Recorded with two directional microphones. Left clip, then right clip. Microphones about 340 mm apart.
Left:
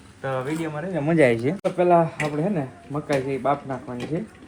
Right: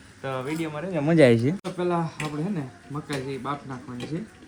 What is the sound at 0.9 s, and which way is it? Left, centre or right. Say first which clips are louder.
Speech: right 1 dB; right.